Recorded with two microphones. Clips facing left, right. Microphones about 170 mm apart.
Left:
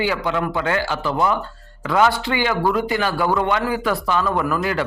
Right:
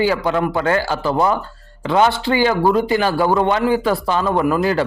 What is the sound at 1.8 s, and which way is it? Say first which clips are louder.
A man's voice: right 2 dB; 25° right (ahead or behind).